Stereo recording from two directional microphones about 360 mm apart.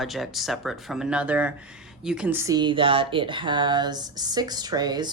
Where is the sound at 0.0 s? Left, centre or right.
Centre.